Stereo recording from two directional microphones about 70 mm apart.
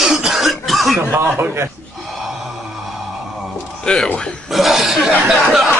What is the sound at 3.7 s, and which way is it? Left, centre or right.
Speech, centre.